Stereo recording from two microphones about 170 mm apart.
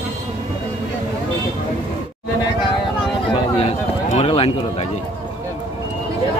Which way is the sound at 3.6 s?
40° left (ahead or behind).